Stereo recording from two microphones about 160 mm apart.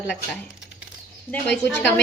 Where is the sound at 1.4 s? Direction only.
5° left (ahead or behind).